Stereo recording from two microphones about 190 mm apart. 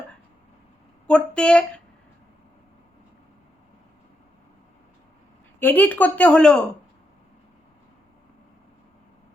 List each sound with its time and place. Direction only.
1.0 s speech: 5° left (ahead or behind)
5.5 s a woman's voice: 10° left (ahead or behind)